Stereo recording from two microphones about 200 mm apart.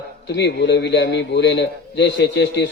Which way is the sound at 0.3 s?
60° left (ahead or behind).